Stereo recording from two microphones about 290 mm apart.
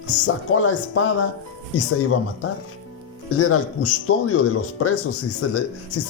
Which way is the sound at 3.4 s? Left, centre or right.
Left.